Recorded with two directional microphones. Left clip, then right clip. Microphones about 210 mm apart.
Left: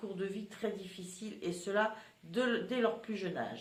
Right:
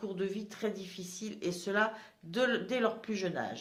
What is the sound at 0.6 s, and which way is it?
Speech, 40° right (ahead or behind).